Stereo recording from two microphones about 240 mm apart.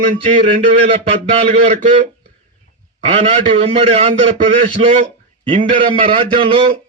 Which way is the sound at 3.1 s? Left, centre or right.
Right.